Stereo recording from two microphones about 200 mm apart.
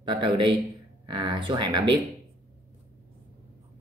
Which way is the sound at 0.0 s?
25° right (ahead or behind).